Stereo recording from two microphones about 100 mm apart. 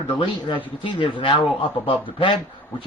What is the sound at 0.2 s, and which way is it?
Speech, 65° left (ahead or behind).